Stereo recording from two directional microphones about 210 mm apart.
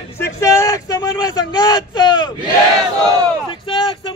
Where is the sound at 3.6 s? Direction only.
20° left (ahead or behind).